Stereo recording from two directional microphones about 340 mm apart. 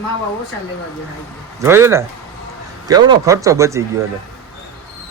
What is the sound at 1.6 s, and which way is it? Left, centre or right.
Speech, centre.